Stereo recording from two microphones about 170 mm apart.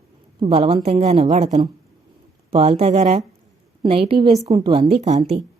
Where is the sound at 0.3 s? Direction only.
35° right (ahead or behind).